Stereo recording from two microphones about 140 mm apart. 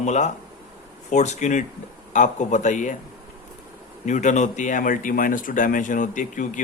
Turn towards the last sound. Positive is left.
turn(degrees=65)  # may be behind; listen again after turning